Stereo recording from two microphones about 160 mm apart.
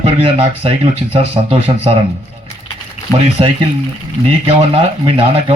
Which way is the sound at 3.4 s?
35° right (ahead or behind).